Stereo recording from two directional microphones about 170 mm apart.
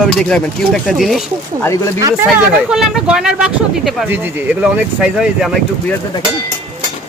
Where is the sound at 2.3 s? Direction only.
5° right (ahead or behind).